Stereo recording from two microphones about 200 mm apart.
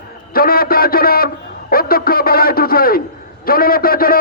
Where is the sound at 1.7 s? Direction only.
50° left (ahead or behind).